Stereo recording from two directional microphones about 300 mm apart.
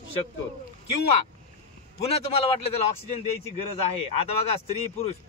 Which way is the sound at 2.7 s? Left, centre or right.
Left.